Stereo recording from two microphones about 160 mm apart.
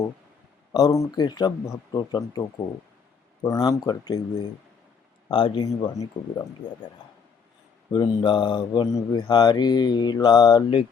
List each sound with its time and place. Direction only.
0.7 s mantra: 20° left (ahead or behind)
3.4 s mantra: 20° left (ahead or behind)
7.9 s mantra: 30° left (ahead or behind)